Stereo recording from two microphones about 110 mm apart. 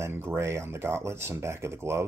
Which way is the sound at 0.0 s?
20° right (ahead or behind).